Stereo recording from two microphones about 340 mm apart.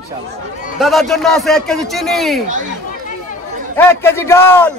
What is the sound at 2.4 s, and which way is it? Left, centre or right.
Speech, right.